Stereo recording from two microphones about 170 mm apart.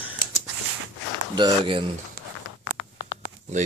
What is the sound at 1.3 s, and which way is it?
Speech, 30° right (ahead or behind).